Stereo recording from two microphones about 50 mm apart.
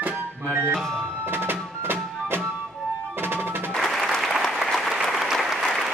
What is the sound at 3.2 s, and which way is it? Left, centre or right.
Percussion, right.